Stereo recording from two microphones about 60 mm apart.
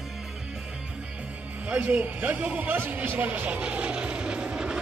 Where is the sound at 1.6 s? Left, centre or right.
Right.